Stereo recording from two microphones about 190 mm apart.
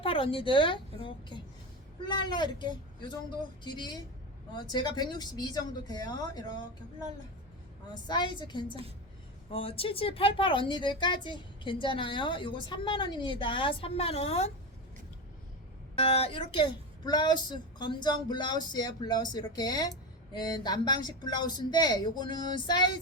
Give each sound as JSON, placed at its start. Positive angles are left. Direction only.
{"t": 0.0, "sound": "a woman's voice", "side_deg": 30}
{"t": 8.0, "sound": "a woman's voice", "side_deg": 25}
{"t": 16.0, "sound": "a woman's voice", "side_deg": 30}